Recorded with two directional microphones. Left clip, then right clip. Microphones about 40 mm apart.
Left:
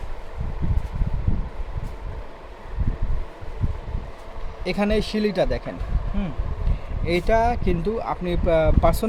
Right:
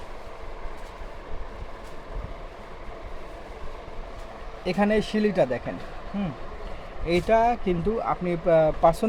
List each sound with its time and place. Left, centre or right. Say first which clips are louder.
4.6 s speech: even; left
7.1 s speech: left 1 dB; left